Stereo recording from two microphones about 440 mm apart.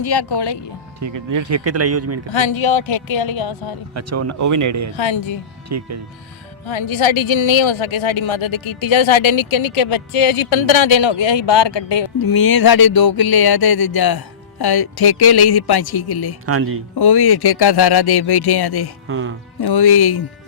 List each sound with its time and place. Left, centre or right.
0.0 s speech: left
0.9 s speech: right
2.3 s speech: left
3.9 s speech: right
4.9 s speech: left
5.6 s speech: right
6.7 s speech: left
12.2 s a sound: left
16.5 s speech: right
16.9 s speech: left
19.0 s speech: right
19.6 s speech: left